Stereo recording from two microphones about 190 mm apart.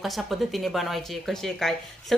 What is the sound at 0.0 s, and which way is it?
Speech, centre (ahead or behind).